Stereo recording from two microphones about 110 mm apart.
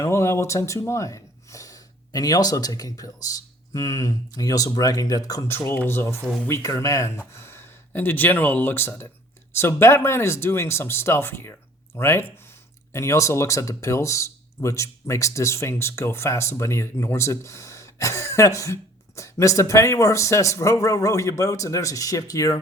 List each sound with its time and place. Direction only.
0.0 s speech: 25° left (ahead or behind)
5.5 s speech: 20° left (ahead or behind)